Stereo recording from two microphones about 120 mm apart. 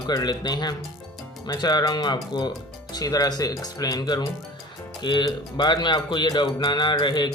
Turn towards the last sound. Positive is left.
turn(degrees=40)  # may be behind; listen again after turning